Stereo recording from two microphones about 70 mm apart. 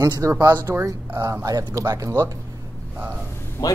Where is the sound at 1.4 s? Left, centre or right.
Right.